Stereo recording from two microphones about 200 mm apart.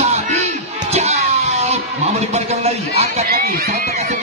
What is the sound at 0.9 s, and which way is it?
Music, 30° right (ahead or behind).